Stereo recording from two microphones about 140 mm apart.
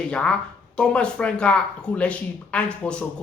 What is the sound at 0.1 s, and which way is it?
Speech, 5° left (ahead or behind).